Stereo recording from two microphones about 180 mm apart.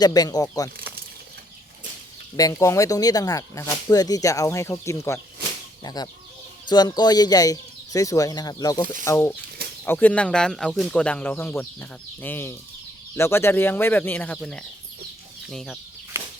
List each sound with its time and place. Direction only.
0.0 s speech: 20° left (ahead or behind)
2.3 s speech: 20° left (ahead or behind); by 15.8 s centre (ahead or behind)